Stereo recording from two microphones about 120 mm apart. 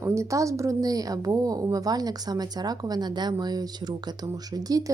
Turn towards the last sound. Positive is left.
turn(degrees=-30)  # may be behind; listen again after turning